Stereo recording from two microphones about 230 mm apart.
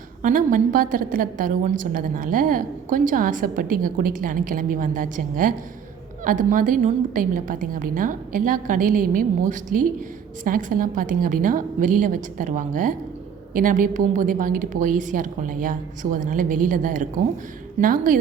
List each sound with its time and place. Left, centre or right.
0.2 s a woman's voice: right